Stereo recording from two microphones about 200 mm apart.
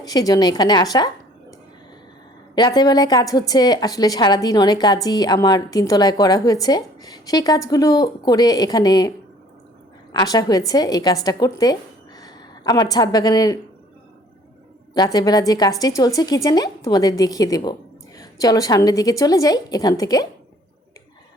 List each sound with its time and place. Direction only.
0.0 s a woman's voice: 20° left (ahead or behind)
2.6 s a woman's voice: 20° left (ahead or behind)
14.9 s a woman's voice: 20° left (ahead or behind)